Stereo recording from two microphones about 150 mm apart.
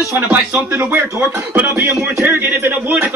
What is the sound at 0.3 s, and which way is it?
Speech, 15° right (ahead or behind).